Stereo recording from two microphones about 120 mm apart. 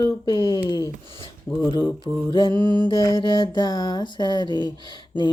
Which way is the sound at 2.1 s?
5° right (ahead or behind).